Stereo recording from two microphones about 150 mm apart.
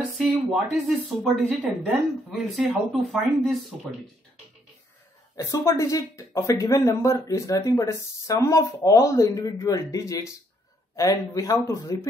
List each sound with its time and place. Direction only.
0.2 s speech: centre (ahead or behind)
2.3 s speech: centre (ahead or behind)
5.4 s speech: 20° left (ahead or behind)